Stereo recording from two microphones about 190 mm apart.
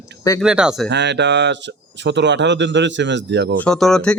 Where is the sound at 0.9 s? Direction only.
65° right (ahead or behind).